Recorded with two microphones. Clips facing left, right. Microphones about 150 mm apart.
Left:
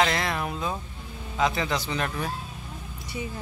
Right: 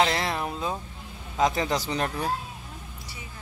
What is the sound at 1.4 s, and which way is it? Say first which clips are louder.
Speech: right 2 dB; 40° right (ahead or behind).